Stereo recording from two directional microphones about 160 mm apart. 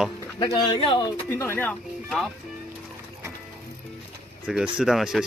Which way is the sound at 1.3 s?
15° left (ahead or behind).